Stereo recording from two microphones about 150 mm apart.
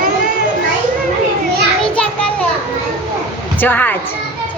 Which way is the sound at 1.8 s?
5° left (ahead or behind).